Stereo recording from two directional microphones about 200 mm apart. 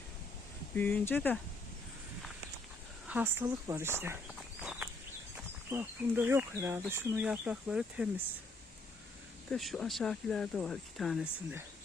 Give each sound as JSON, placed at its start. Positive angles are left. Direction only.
{"t": 0.8, "sound": "speech", "side_deg": 5}
{"t": 3.1, "sound": "speech", "side_deg": -10}
{"t": 4.6, "sound": "a sound", "side_deg": -5}
{"t": 5.7, "sound": "speech", "side_deg": -10}
{"t": 9.5, "sound": "speech", "side_deg": 0}